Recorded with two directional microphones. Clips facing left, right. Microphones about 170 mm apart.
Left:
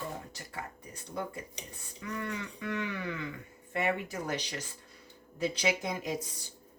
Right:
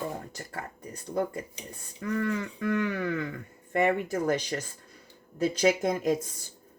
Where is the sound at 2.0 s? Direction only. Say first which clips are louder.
Right 8 dB; 50° right (ahead or behind).